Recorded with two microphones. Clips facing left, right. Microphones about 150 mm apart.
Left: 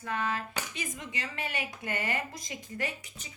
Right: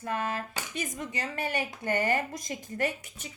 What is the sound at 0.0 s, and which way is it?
Speech, 45° right (ahead or behind).